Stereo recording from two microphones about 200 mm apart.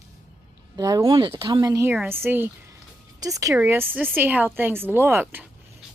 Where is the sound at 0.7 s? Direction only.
15° right (ahead or behind).